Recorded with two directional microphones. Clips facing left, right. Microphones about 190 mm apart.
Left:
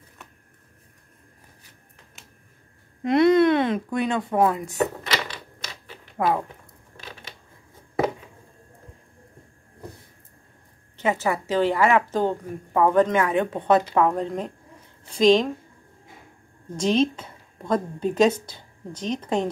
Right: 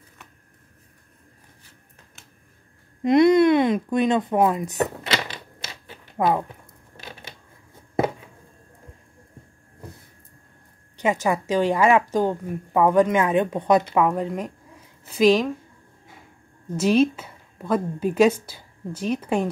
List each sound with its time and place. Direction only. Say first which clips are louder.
3.0 s speech: right 2 dB; 15° right (ahead or behind)
6.1 s speech: right 2 dB; 20° right (ahead or behind)
11.0 s a woman's voice: right 2 dB; 15° right (ahead or behind)
16.7 s a woman's voice: right 3 dB; 5° right (ahead or behind)